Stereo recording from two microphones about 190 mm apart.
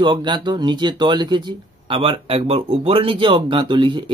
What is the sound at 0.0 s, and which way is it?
Speech, 25° right (ahead or behind).